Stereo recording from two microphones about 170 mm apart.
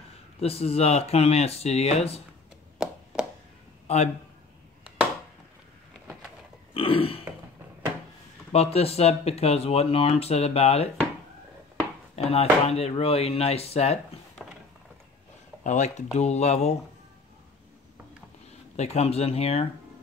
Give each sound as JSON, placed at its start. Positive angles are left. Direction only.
{"t": 0.4, "sound": "speech", "side_deg": 35}
{"t": 3.8, "sound": "a man's voice", "side_deg": 40}
{"t": 6.7, "sound": "burping", "side_deg": 35}
{"t": 8.5, "sound": "speech", "side_deg": 35}
{"t": 12.2, "sound": "speech", "side_deg": 35}
{"t": 15.6, "sound": "speech", "side_deg": 45}
{"t": 18.8, "sound": "speech", "side_deg": 40}